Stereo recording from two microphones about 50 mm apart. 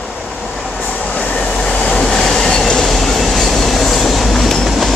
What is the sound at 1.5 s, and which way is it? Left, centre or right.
Train, centre.